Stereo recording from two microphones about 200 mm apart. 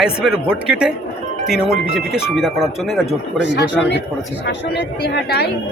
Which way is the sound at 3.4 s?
60° left (ahead or behind).